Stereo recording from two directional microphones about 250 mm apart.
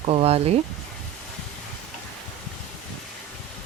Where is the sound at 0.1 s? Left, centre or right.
Right.